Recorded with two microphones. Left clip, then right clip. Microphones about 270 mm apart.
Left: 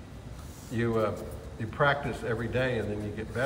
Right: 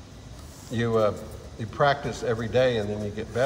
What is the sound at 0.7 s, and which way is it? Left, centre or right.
A man's voice, centre.